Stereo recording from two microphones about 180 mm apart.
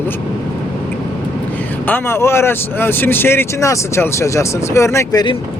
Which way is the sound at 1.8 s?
10° left (ahead or behind).